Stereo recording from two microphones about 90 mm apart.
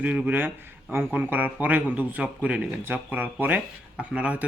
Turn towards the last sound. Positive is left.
turn(degrees=-15)  # may be behind; listen again after turning